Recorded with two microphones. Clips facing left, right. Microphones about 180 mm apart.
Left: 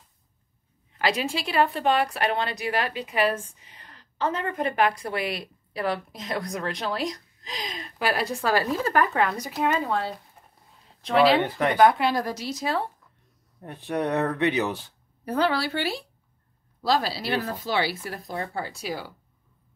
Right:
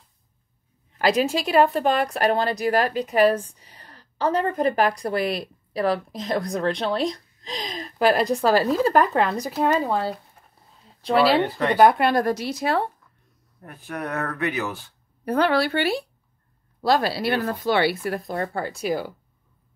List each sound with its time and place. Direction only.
0.9 s a woman's voice: 40° right (ahead or behind)
11.8 s speech: 55° right (ahead or behind)
13.6 s speech: 25° left (ahead or behind)
15.2 s speech: 60° right (ahead or behind)